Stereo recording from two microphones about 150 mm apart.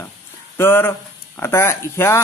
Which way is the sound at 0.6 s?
15° left (ahead or behind).